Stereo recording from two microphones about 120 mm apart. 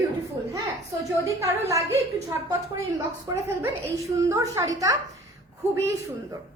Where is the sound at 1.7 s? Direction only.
25° right (ahead or behind).